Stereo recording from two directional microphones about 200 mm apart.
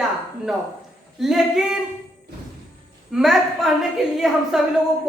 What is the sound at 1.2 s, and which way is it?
Speech, centre (ahead or behind).